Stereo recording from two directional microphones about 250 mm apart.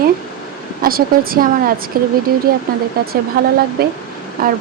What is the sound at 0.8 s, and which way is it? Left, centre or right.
Speech, right.